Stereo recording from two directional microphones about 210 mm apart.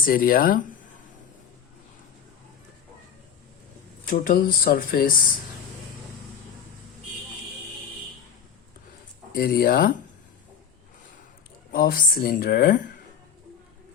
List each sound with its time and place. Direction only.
0.0 s speech: 45° left (ahead or behind)
4.1 s speech: 40° left (ahead or behind)
9.3 s speech: 45° left (ahead or behind)
11.7 s speech: 45° left (ahead or behind)